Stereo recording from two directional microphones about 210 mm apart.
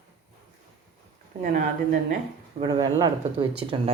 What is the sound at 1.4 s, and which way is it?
Speech, 40° right (ahead or behind).